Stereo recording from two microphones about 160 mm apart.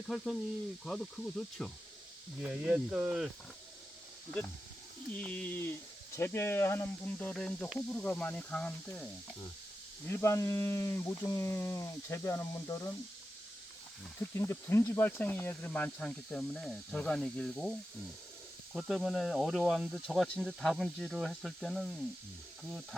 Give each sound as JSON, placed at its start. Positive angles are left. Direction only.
{"t": 0.9, "sound": "speech", "side_deg": 5}
{"t": 4.3, "sound": "speech", "side_deg": 5}
{"t": 10.1, "sound": "speech", "side_deg": 15}
{"t": 14.3, "sound": "speech", "side_deg": 15}